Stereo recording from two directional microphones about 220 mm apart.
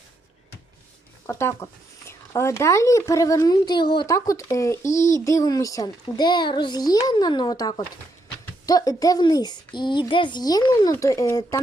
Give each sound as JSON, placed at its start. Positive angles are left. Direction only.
{"t": 1.3, "sound": "a child's voice", "side_deg": 10}